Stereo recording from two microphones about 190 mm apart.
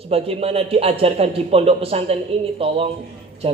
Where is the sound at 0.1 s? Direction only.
30° right (ahead or behind).